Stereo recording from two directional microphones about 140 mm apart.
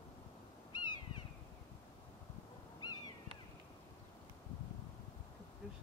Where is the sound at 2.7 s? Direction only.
30° left (ahead or behind).